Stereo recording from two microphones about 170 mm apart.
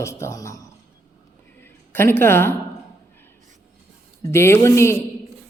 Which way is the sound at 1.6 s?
15° left (ahead or behind).